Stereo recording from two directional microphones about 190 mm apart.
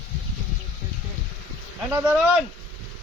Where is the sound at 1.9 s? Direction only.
15° right (ahead or behind).